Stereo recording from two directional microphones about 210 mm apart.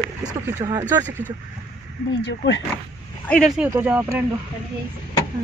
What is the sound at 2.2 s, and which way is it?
Speech, 60° left (ahead or behind).